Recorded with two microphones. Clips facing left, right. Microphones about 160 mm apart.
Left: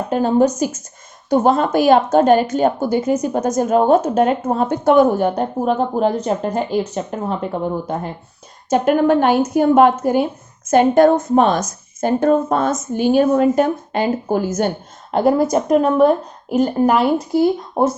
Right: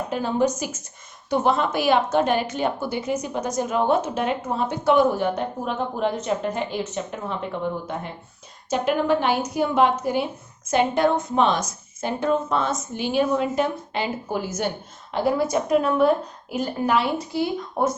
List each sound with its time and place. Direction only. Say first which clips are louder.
0.1 s a woman's voice: left 8 dB; 45° left (ahead or behind)